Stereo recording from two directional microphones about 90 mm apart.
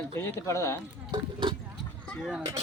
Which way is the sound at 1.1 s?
65° right (ahead or behind).